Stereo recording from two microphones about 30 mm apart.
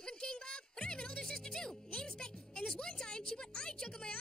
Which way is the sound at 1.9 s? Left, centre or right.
Left.